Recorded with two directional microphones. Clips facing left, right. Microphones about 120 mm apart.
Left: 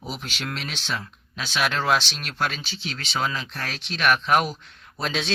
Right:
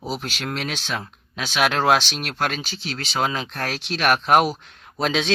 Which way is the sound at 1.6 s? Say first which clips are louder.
Right 4 dB; 70° right (ahead or behind).